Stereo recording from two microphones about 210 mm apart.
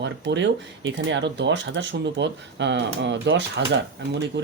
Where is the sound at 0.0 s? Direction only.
55° right (ahead or behind).